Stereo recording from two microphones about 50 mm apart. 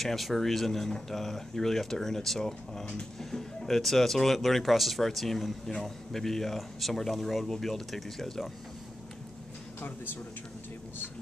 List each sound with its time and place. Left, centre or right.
0.0 s speech: centre
9.8 s speech: left